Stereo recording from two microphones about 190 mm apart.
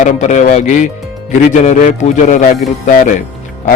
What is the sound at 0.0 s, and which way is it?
A man's voice, 40° left (ahead or behind).